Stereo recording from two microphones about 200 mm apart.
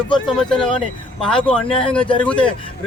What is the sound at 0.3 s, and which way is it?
Speech, 5° left (ahead or behind).